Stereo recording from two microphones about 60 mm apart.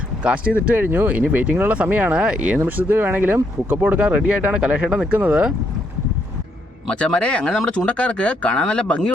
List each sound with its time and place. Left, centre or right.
0.2 s speech: right
2.6 s speech: right
6.8 s speech: centre